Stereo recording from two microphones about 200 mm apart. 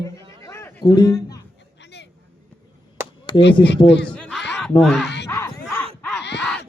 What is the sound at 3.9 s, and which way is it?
Speech, 60° left (ahead or behind).